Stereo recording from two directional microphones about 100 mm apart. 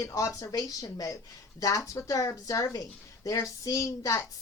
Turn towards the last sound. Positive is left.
turn(degrees=35)  # may be behind; listen again after turning